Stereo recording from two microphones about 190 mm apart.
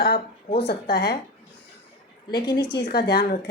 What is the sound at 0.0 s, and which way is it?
Speech, 55° left (ahead or behind).